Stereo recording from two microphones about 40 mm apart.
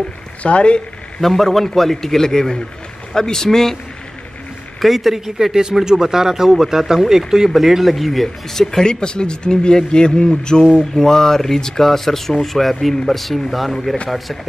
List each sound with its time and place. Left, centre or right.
0.4 s speech: left
1.2 s speech: centre
4.8 s speech: centre
8.8 s speech: left
10.8 s speech: centre